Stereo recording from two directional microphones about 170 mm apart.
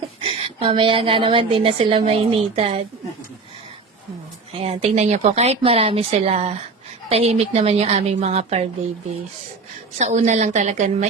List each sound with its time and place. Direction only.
0.2 s a woman's voice: 35° right (ahead or behind)
4.5 s a woman's voice: 35° right (ahead or behind)
10.0 s a woman's voice: 45° right (ahead or behind)